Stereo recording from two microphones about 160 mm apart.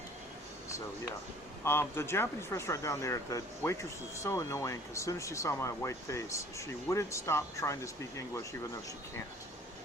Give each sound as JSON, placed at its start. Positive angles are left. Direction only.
{"t": 1.6, "sound": "speech", "side_deg": 15}